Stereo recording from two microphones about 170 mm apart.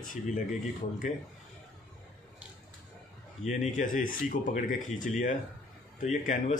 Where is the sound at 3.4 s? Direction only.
45° left (ahead or behind).